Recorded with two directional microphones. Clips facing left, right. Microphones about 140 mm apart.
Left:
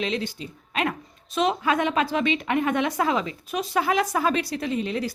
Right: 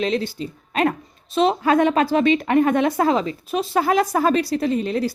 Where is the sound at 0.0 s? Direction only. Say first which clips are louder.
Right 5 dB; 40° right (ahead or behind).